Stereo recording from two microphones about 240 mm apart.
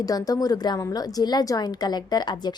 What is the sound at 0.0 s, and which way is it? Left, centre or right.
A woman's voice, centre.